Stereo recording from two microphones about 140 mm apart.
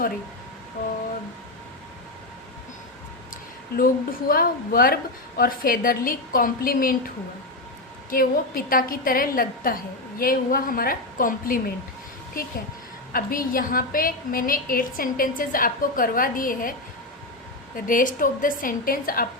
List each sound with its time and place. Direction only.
3.8 s a woman's voice: 90° left
8.1 s a woman's voice: 90° left
17.7 s a woman's voice: 75° left (ahead or behind)